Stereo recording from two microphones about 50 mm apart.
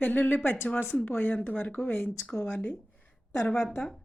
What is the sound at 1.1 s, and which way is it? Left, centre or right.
Speech, left.